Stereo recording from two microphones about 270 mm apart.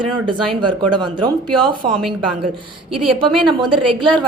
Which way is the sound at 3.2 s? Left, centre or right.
Centre.